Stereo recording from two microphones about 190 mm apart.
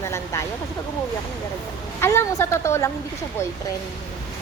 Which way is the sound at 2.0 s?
15° left (ahead or behind).